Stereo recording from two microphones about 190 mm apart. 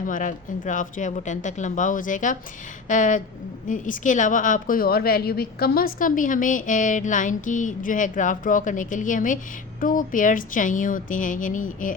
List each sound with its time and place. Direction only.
0.0 s a woman's voice: 45° left (ahead or behind)